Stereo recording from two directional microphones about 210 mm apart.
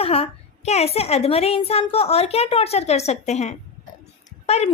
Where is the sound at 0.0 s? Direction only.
30° left (ahead or behind).